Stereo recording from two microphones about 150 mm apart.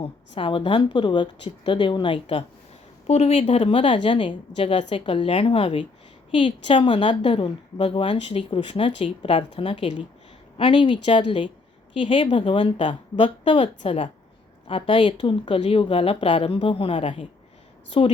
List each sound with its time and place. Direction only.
0.0 s a woman's voice: 35° left (ahead or behind)